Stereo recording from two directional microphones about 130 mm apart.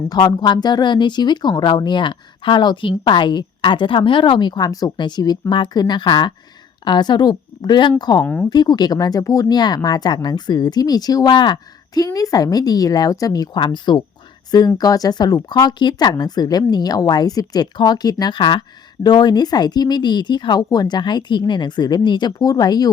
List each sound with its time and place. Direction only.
0.1 s speech: 30° left (ahead or behind)
8.2 s speech: 15° left (ahead or behind)
8.4 s speech: 30° left (ahead or behind)